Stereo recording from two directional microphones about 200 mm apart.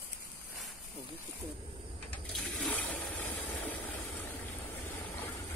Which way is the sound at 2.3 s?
Centre (ahead or behind).